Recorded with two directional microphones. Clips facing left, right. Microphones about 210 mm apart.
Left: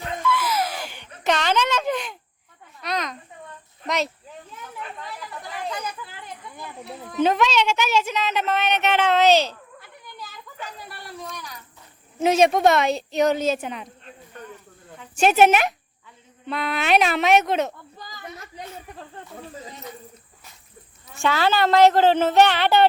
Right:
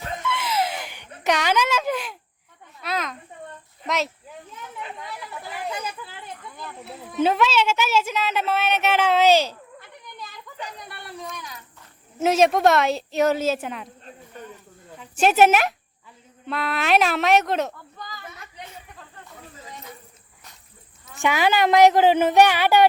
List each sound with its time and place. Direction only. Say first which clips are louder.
0.2 s a sound: left 2 dB; 25° right (ahead or behind); by 3.2 s centre (ahead or behind)
3.8 s speech: even; centre (ahead or behind)
5.5 s a sound: even; 5° right (ahead or behind)
6.8 s a woman's voice: left 1 dB; centre (ahead or behind)
9.8 s a sound: left 1 dB; centre (ahead or behind)
10.8 s speech: even; centre (ahead or behind)
14.9 s speech: even; 5° right (ahead or behind)
17.9 s snake: left 1 dB; 35° left (ahead or behind)
21.2 s a woman's voice: even; 15° right (ahead or behind)